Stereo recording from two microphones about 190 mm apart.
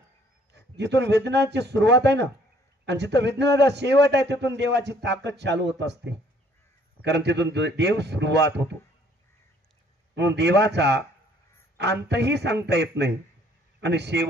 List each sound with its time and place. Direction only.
0.6 s a man's voice: 65° right (ahead or behind)
10.1 s a man's voice: 65° right (ahead or behind)